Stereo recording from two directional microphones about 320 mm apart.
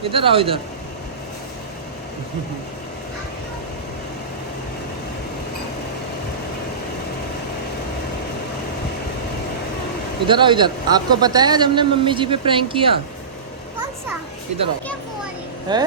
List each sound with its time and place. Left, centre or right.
0.0 s a man's voice: centre
10.2 s a man's voice: centre
15.7 s a man's voice: centre